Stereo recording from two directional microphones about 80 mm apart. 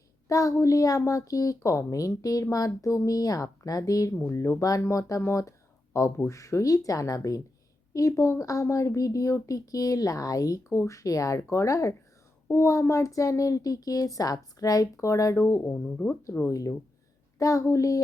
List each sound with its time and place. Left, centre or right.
0.3 s speech: left
4.1 s speech: left
10.7 s speech: left
15.7 s speech: centre
16.4 s speech: left